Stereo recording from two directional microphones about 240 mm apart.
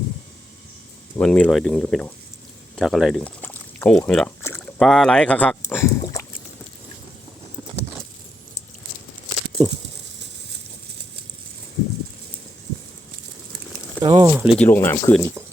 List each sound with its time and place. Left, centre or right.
1.1 s speech: centre
2.7 s a sound: centre
14.0 s speech: centre
14.3 s speech: centre
14.6 s speech: centre